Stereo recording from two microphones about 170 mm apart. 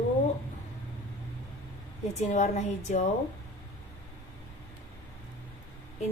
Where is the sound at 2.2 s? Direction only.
45° left (ahead or behind).